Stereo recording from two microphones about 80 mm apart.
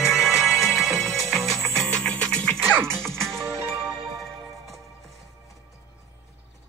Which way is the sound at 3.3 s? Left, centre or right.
Right.